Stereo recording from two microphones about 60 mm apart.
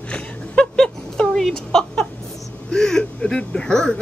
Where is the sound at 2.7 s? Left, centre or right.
Centre.